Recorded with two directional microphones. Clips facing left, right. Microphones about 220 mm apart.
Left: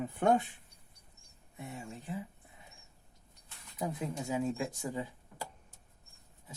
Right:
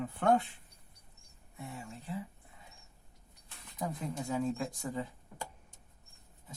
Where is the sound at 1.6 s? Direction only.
20° left (ahead or behind).